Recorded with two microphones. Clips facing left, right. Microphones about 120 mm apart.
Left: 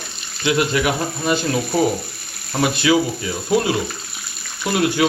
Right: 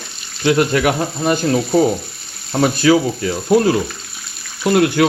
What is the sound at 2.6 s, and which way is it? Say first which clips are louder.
Speech: right 4 dB; 40° right (ahead or behind).